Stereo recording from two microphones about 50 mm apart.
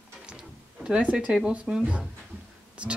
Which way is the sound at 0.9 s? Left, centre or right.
Right.